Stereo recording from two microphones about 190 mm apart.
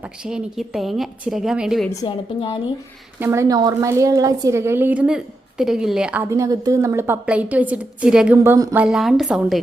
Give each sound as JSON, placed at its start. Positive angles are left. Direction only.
{"t": 0.3, "sound": "a woman's voice", "side_deg": -5}
{"t": 1.9, "sound": "a woman's voice", "side_deg": 20}
{"t": 3.2, "sound": "a woman's voice", "side_deg": -15}
{"t": 8.5, "sound": "a woman's voice", "side_deg": -20}
{"t": 8.8, "sound": "a woman's voice", "side_deg": 0}